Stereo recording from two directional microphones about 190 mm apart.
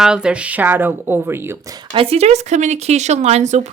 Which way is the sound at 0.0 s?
5° right (ahead or behind).